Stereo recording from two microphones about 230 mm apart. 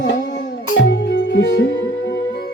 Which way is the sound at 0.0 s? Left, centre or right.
Left.